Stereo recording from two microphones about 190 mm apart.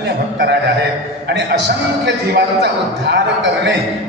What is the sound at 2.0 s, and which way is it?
A man's voice, 60° right (ahead or behind).